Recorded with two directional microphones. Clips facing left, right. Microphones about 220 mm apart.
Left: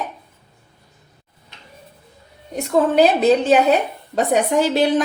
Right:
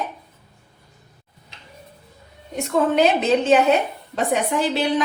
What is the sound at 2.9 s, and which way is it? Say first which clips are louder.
A woman's voice: left 4 dB; 35° left (ahead or behind).